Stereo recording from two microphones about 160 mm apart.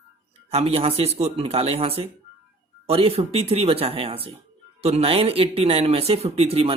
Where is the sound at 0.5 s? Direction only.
35° right (ahead or behind).